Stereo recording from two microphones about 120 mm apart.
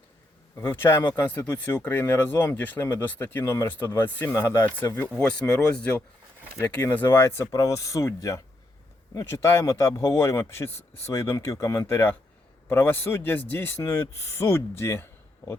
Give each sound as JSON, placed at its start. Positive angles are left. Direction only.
{"t": 0.5, "sound": "speech", "side_deg": 20}